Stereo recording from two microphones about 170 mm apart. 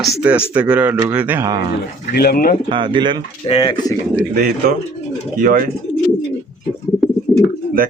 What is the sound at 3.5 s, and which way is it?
Speech, 30° left (ahead or behind).